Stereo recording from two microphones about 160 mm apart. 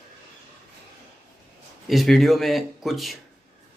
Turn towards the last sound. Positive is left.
turn(degrees=0)  # may be behind; listen again after turning